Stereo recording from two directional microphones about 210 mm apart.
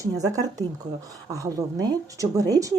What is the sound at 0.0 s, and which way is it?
Speech, 15° right (ahead or behind).